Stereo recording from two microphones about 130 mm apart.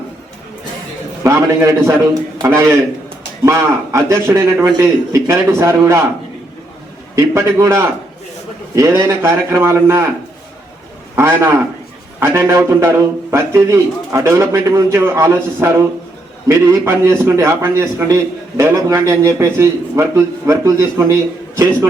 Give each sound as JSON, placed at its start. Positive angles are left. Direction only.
{"t": 1.2, "sound": "a man's voice", "side_deg": -20}
{"t": 7.2, "sound": "a man's voice", "side_deg": -20}
{"t": 11.1, "sound": "a man's voice", "side_deg": -20}